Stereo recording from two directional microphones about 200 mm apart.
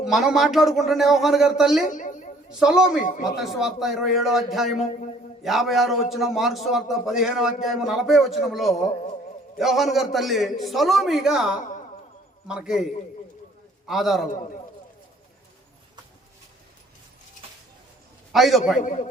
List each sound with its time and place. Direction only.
0.0 s a man's voice: centre (ahead or behind)
1.9 s a sound: 40° left (ahead or behind)
2.6 s a man's voice: 5° right (ahead or behind)
18.3 s a man's voice: centre (ahead or behind)